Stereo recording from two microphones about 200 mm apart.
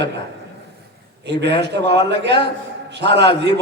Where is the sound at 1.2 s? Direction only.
60° right (ahead or behind).